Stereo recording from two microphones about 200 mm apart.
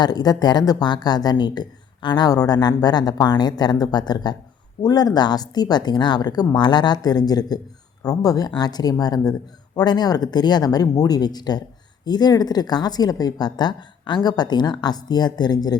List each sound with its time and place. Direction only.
0.0 s a woman's voice: 20° left (ahead or behind)